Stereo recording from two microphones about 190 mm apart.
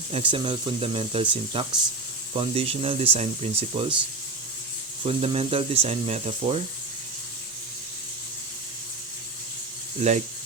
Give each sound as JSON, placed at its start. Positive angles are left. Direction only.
{"t": 0.1, "sound": "speech", "side_deg": -25}
{"t": 5.0, "sound": "speech", "side_deg": -30}